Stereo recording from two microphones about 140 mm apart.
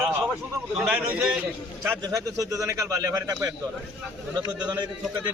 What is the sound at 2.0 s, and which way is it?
Speech, 25° right (ahead or behind).